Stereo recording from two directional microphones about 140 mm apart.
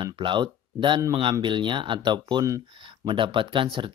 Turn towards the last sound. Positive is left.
turn(degrees=-35)  # may be behind; listen again after turning